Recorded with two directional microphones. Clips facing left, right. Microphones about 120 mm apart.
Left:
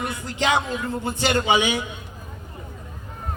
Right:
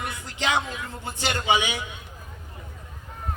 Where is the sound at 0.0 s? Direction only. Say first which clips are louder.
Left 4 dB; 45° left (ahead or behind).